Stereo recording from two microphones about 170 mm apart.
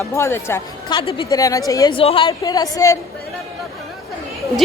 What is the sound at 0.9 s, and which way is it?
Speech, 30° left (ahead or behind).